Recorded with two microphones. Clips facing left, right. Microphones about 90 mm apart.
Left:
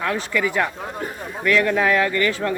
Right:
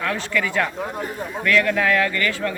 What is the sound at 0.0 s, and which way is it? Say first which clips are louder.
A man's voice: left 1 dB; 20° left (ahead or behind).